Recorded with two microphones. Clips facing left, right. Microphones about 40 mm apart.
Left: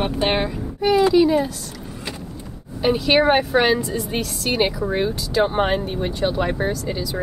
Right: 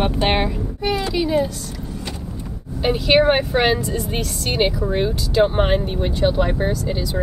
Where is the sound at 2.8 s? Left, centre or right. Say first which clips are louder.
Right 1 dB; centre.